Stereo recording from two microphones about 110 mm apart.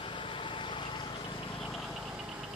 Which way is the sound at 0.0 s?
50° left (ahead or behind).